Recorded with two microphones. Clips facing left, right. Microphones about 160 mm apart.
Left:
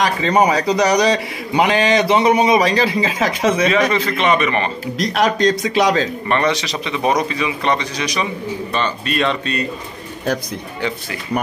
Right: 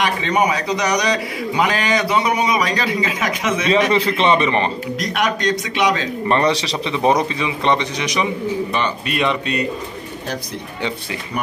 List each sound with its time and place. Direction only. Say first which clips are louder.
0.0 s a man's voice: left 3 dB; 35° left (ahead or behind)
3.9 s a man's voice: right 1 dB; 30° right (ahead or behind)
4.9 s a man's voice: left 7 dB; 35° left (ahead or behind)
6.2 s a man's voice: right 1 dB; 30° right (ahead or behind); by 9.7 s 15° right (ahead or behind)